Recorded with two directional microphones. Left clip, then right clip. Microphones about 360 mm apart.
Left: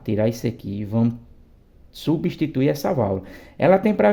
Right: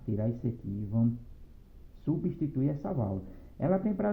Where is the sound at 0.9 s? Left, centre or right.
Left.